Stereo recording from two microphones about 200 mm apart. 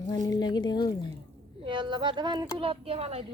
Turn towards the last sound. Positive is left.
turn(degrees=-30)  # may be behind; listen again after turning